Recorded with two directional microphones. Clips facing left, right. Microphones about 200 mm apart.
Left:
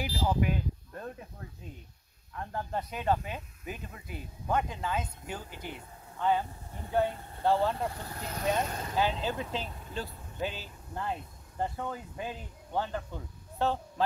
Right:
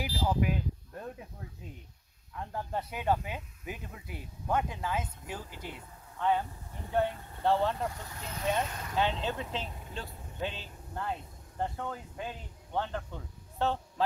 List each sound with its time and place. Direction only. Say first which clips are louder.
0.0 s a sound: left 1 dB; 5° right (ahead or behind)
2.3 s speech: left 1 dB; 5° right (ahead or behind)
7.9 s speech: left 3 dB; 35° left (ahead or behind)
8.9 s speech: left 1 dB; 5° left (ahead or behind)